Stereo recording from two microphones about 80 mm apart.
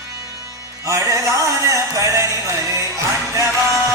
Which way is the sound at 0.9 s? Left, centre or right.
Right.